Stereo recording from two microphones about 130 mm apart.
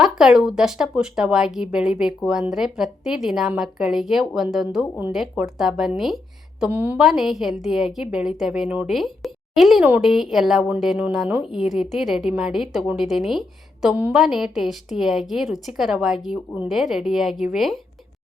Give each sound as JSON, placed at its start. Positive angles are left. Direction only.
{"t": 0.0, "sound": "a woman's voice", "side_deg": -5}
{"t": 7.0, "sound": "speech", "side_deg": 0}